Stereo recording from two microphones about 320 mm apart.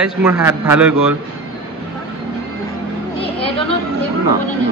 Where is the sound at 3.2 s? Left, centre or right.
Centre.